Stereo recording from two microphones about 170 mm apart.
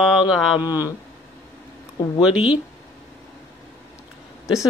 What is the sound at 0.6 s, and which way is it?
Speech, 20° left (ahead or behind).